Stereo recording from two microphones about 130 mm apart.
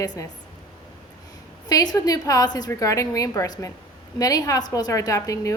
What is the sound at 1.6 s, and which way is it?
A woman's voice, 30° left (ahead or behind).